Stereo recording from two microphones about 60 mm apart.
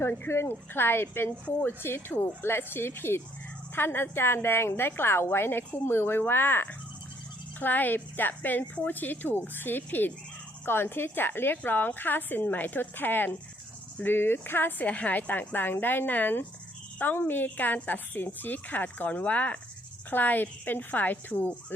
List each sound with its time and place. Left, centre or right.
0.0 s a woman's voice: left